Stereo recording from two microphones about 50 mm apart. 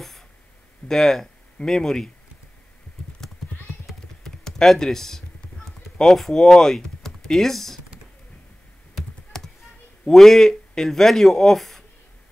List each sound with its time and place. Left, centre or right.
0.8 s speech: centre
3.8 s computer keyboard: centre
5.7 s speech: centre
10.0 s speech: centre